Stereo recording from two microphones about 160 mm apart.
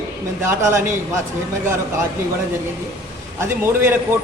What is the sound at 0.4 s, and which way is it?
Speech, 15° right (ahead or behind).